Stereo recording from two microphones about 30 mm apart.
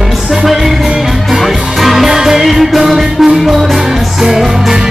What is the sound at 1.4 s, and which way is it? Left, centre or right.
Music, centre.